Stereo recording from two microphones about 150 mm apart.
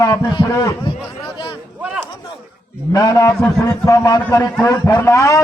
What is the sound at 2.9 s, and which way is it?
A man's voice, 25° left (ahead or behind).